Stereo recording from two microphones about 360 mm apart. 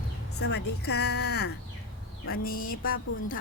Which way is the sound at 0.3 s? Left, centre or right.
Left.